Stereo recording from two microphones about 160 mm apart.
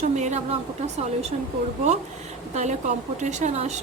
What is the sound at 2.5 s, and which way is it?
A woman's voice, 45° right (ahead or behind).